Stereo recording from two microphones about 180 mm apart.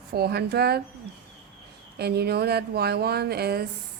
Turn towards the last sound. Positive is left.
turn(degrees=-60)  # may be behind; listen again after turning